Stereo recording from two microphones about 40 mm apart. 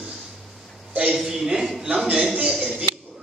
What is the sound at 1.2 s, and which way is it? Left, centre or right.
A man's voice, centre.